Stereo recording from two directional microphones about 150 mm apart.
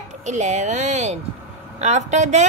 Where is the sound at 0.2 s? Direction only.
50° right (ahead or behind).